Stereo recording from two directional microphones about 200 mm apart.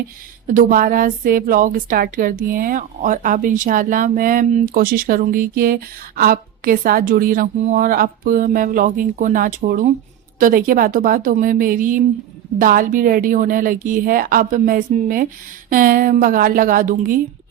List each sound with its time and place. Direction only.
0.4 s a woman's voice: 40° right (ahead or behind)